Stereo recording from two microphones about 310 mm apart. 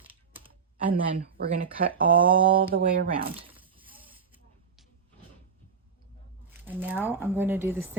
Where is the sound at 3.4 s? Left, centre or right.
Centre.